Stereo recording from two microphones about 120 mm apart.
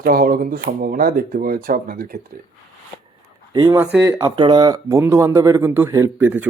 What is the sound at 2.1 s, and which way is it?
Speech, 90° right.